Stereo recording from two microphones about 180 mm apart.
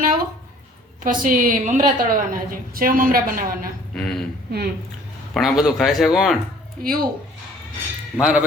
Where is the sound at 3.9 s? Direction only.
5° left (ahead or behind).